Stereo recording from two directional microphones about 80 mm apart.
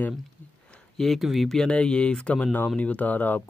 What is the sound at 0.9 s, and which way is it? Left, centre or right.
Speech, centre.